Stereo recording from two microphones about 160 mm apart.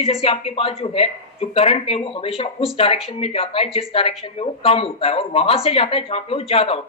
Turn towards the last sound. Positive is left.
turn(degrees=35)  # may be behind; listen again after turning